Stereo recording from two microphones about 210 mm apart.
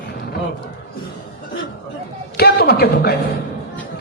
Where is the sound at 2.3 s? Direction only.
50° left (ahead or behind).